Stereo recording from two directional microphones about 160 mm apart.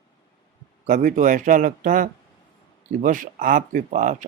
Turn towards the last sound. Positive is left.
turn(degrees=-50)  # may be behind; listen again after turning